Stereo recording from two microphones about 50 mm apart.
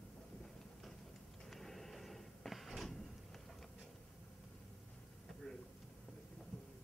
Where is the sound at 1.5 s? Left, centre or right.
Centre.